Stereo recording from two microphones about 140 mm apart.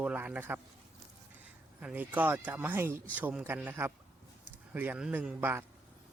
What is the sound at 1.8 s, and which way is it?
Speech, 10° right (ahead or behind).